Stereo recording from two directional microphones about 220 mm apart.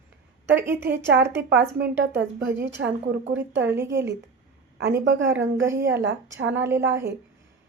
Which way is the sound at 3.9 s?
50° right (ahead or behind).